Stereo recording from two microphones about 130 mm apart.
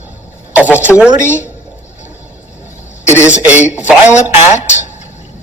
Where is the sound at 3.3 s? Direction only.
10° right (ahead or behind).